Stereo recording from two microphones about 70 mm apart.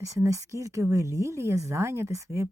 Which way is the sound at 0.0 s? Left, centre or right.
Right.